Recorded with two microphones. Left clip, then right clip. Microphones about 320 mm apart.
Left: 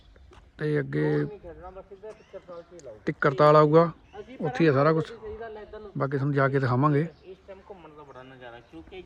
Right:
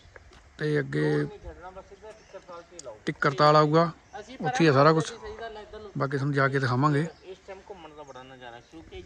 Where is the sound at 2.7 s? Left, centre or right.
Centre.